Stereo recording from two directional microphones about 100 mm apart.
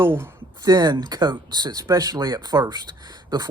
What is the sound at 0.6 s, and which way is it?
Speech, 45° right (ahead or behind).